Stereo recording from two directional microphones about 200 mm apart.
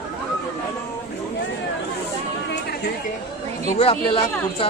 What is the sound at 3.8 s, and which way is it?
Speech, 25° left (ahead or behind).